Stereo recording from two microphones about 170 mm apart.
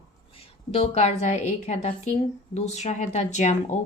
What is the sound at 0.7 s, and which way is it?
A woman's voice, 35° left (ahead or behind).